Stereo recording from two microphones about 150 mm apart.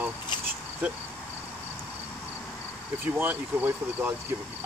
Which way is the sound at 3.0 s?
10° right (ahead or behind).